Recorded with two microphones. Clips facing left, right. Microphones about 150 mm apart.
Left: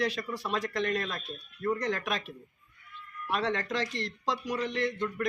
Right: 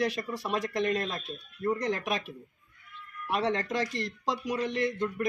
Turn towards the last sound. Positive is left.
turn(degrees=-15)  # may be behind; listen again after turning